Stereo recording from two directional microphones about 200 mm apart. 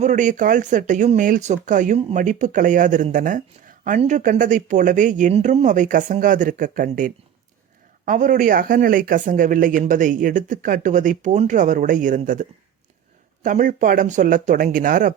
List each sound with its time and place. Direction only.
0.0 s speech: 40° right (ahead or behind)